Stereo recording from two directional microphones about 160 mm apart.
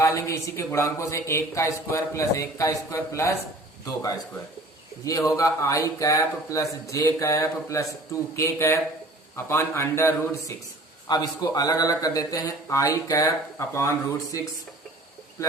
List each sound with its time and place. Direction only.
0.0 s a man's voice: 20° left (ahead or behind)